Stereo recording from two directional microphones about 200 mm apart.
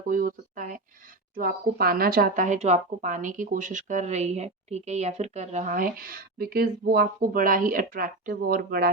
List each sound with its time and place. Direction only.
0.1 s a woman's voice: 45° right (ahead or behind)